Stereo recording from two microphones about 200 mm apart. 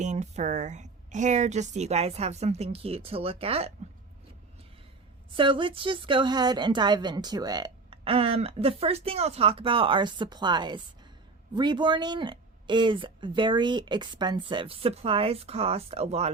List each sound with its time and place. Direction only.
0.0 s a woman's voice: 35° right (ahead or behind)
5.4 s a woman's voice: 25° right (ahead or behind)